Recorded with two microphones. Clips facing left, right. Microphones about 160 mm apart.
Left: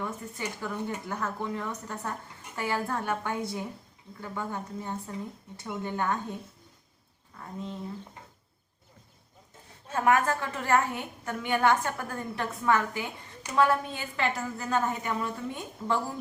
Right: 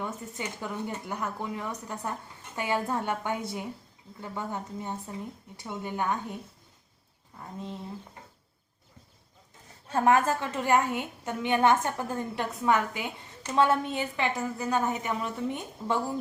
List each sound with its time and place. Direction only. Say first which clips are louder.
0.0 s a woman's voice: even; 20° right (ahead or behind)
7.3 s a woman's voice: left 1 dB; 20° right (ahead or behind)
9.9 s a woman's voice: right 1 dB; 25° right (ahead or behind)